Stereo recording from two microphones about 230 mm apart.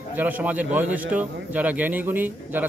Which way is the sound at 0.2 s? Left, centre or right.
Centre.